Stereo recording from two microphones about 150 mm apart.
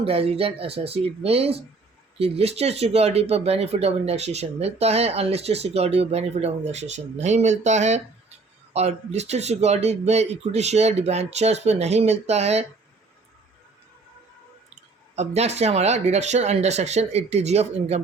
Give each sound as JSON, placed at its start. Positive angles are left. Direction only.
{"t": 0.0, "sound": "speech", "side_deg": -40}
{"t": 15.1, "sound": "speech", "side_deg": -45}